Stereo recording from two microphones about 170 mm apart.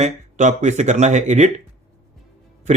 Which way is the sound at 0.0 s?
45° right (ahead or behind).